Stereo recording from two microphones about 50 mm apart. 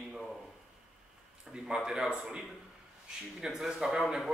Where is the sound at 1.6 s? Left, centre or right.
Centre.